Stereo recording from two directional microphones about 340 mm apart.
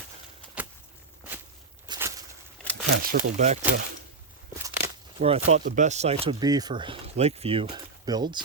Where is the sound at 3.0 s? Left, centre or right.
Right.